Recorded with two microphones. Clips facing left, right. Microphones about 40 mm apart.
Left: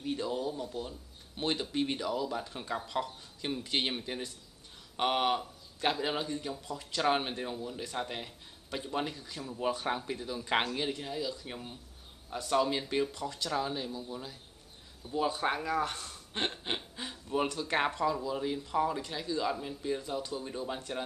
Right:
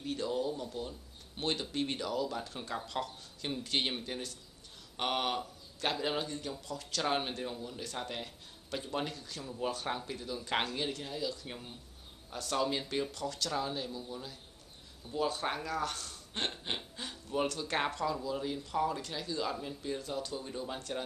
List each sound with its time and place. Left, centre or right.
0.0 s a man's voice: centre
16.4 s speech: centre